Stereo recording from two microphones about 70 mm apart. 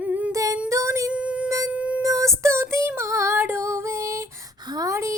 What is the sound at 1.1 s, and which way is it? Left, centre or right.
Music, centre.